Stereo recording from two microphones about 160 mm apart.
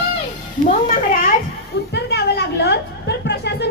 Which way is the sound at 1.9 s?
90° left.